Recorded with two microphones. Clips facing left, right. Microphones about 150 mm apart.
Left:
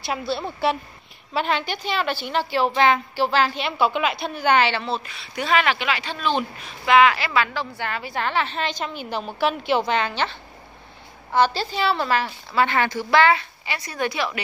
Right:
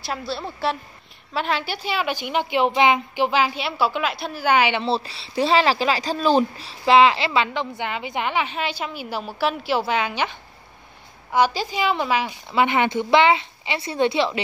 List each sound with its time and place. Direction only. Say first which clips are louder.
0.0 s a woman's voice: left 2 dB; centre (ahead or behind)
4.8 s speech: right 4 dB; 30° right (ahead or behind); by 10.3 s 10° right (ahead or behind)
11.3 s speech: even; 10° right (ahead or behind)